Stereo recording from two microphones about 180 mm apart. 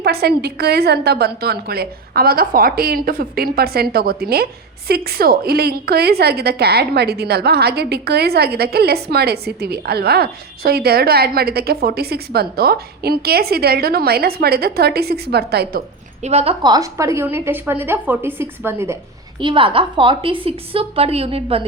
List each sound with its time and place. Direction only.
0.0 s a woman's voice: 65° right (ahead or behind)
16.2 s a woman's voice: 35° right (ahead or behind)
16.7 s a woman's voice: 20° right (ahead or behind)
19.4 s a woman's voice: 30° right (ahead or behind)